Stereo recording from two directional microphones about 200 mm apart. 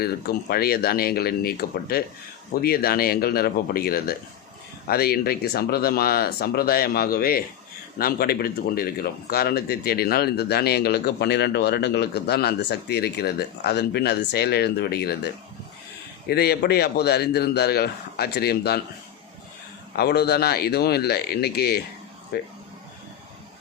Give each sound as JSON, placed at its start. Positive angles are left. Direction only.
{"t": 0.0, "sound": "speech", "side_deg": 50}
{"t": 20.0, "sound": "speech", "side_deg": 55}